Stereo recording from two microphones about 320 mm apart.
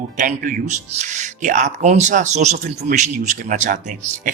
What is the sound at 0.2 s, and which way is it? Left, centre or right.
Speech, right.